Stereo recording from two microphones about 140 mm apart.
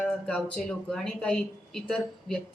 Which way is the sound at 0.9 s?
5° left (ahead or behind).